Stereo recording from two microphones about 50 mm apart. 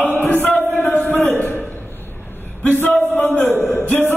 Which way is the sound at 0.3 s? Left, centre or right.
Left.